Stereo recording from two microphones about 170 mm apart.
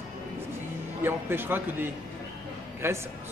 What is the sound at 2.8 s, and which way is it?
Speech, 15° right (ahead or behind).